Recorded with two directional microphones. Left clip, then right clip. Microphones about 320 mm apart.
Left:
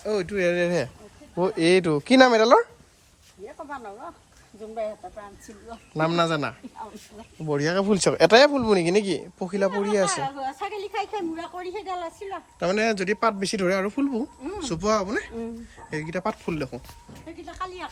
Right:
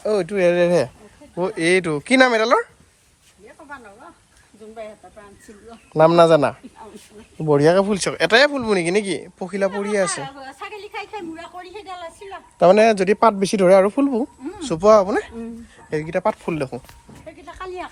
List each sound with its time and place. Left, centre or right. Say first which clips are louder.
0.0 s speech: right 6 dB; centre
1.4 s speech: right 2 dB; centre
5.9 s speech: right 11 dB; centre
10.3 s a woman's voice: left 3 dB; left
12.7 s speech: right 9 dB; centre